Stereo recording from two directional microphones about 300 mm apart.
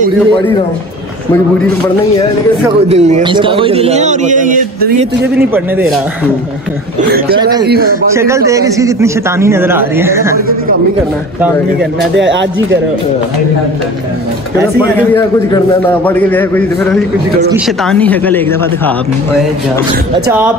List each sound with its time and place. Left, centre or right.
2.9 s a man's voice: right
5.5 s a man's voice: centre
7.6 s speech: right
8.1 s a man's voice: centre
12.2 s speech: right
16.1 s a man's voice: centre
20.2 s a man's voice: centre